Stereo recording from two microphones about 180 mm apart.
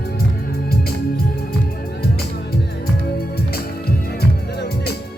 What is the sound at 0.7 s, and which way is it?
Music, 60° left (ahead or behind).